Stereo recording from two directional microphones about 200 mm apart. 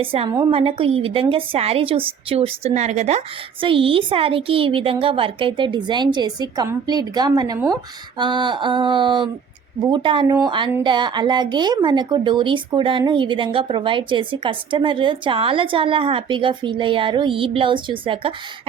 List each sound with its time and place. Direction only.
0.0 s a woman's voice: 25° right (ahead or behind)